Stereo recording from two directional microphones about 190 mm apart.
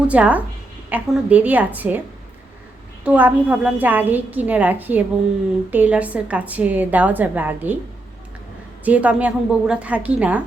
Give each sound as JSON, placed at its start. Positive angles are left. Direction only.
{"t": 0.1, "sound": "a woman's voice", "side_deg": -5}
{"t": 3.0, "sound": "a woman's voice", "side_deg": -5}
{"t": 8.8, "sound": "a woman's voice", "side_deg": -10}